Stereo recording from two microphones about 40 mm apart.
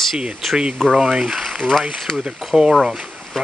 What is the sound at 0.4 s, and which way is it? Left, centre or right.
Speech, centre.